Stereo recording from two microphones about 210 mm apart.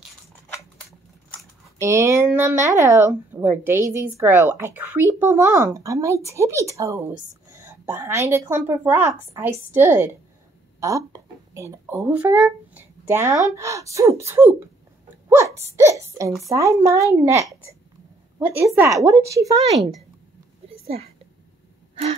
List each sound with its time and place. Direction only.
1.8 s speech: 15° right (ahead or behind)
15.2 s hiccup: 10° right (ahead or behind)
15.7 s speech: 15° right (ahead or behind)
18.8 s speech: 15° right (ahead or behind)
20.6 s a sound: 30° right (ahead or behind)